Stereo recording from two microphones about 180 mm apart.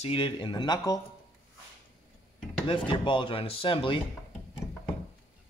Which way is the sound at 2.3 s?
30° left (ahead or behind).